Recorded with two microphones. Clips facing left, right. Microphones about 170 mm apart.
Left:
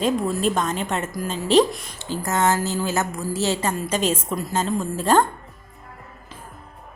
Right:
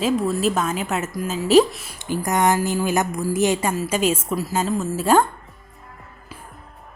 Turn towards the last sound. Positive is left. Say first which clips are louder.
# right 1 dB
turn(degrees=-10)  # may be behind; listen again after turning